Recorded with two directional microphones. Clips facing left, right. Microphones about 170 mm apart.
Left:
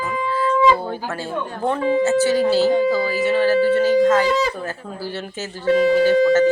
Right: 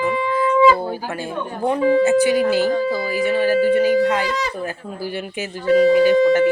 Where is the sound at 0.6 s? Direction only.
10° right (ahead or behind).